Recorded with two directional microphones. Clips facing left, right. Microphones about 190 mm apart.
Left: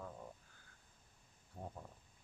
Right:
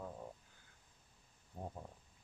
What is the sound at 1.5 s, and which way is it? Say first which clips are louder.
Speech: right 2 dB; 15° right (ahead or behind).